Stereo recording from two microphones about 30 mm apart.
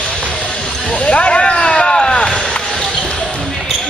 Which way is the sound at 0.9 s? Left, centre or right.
Left.